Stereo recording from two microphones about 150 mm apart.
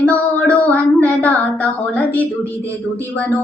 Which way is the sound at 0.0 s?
10° left (ahead or behind).